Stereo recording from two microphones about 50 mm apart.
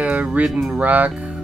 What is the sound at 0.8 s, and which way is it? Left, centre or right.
Speech, right.